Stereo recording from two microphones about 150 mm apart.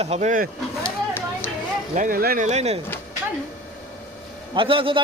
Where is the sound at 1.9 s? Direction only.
70° right (ahead or behind).